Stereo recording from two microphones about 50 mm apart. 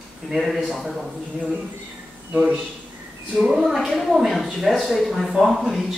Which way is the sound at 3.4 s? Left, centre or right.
Centre.